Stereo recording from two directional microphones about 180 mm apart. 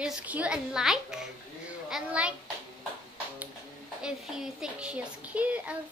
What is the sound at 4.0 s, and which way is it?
Speech, 5° right (ahead or behind).